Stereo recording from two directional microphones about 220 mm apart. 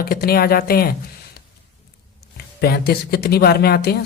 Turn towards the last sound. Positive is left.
turn(degrees=45)  # may be behind; listen again after turning